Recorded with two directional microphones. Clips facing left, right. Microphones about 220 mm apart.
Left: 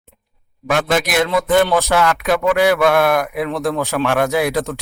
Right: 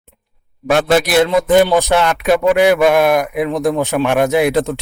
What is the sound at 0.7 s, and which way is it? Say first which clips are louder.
Speech: right 5 dB; 35° right (ahead or behind).